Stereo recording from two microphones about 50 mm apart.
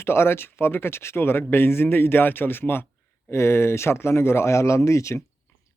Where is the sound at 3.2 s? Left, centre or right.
Left.